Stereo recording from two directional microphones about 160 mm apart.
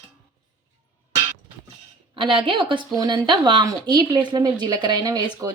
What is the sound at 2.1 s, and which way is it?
A woman's voice, 35° right (ahead or behind).